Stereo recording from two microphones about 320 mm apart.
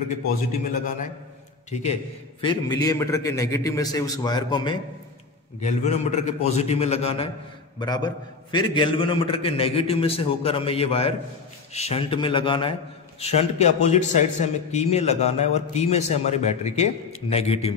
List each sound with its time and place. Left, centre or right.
1.7 s a man's voice: left